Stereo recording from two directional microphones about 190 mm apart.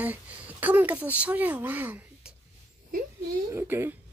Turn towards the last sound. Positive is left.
turn(degrees=-10)  # may be behind; listen again after turning